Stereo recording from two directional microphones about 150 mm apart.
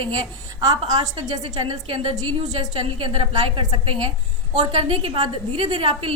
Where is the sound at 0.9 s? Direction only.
30° right (ahead or behind).